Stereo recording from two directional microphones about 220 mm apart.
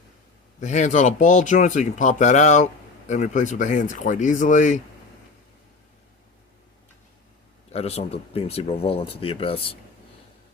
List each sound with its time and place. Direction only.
0.6 s speech: 35° left (ahead or behind)
7.7 s speech: 30° left (ahead or behind)